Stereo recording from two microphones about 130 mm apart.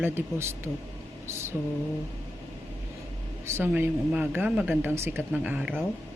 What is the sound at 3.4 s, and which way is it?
A man's voice, 20° right (ahead or behind).